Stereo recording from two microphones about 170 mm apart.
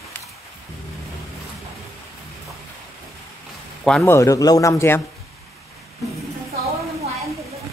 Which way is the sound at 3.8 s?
5° left (ahead or behind).